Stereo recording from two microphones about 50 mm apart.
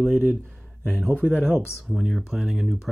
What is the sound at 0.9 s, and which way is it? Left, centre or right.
Speech, right.